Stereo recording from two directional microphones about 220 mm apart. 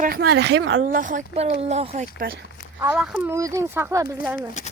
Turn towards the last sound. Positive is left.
turn(degrees=30)  # may be behind; listen again after turning